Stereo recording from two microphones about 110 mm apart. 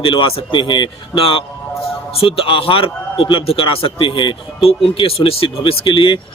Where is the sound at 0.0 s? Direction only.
55° left (ahead or behind).